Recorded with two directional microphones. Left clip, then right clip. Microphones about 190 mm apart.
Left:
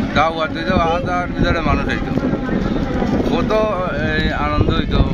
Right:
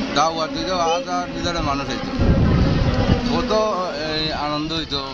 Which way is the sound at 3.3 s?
35° left (ahead or behind).